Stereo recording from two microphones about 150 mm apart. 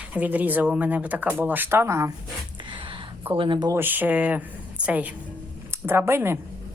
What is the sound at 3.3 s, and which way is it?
Speech, 30° right (ahead or behind).